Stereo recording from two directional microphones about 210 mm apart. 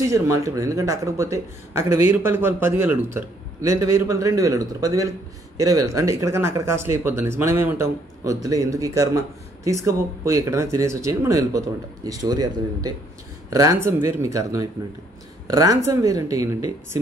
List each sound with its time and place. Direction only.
0.0 s speech: 15° right (ahead or behind)